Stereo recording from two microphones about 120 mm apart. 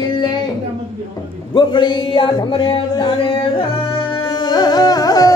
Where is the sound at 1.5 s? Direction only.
40° left (ahead or behind).